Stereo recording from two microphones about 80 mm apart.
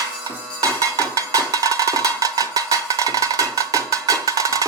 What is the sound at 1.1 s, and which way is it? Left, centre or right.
Music, right.